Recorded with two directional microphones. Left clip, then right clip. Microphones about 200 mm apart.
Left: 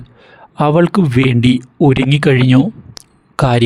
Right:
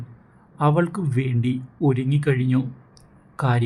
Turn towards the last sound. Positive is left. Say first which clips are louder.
# left 11 dB
turn(degrees=50)  # may be behind; listen again after turning